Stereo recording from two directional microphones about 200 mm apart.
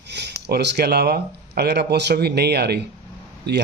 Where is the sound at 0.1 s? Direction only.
55° right (ahead or behind).